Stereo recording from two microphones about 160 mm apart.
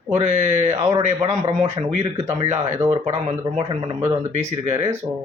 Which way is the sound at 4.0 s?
40° right (ahead or behind).